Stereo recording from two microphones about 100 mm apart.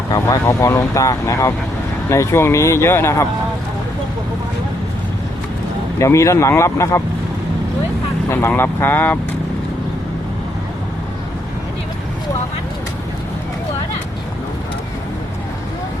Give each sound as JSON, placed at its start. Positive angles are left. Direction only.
{"t": 0.1, "sound": "speech", "side_deg": 35}
{"t": 6.0, "sound": "speech", "side_deg": 30}
{"t": 8.3, "sound": "speech", "side_deg": 25}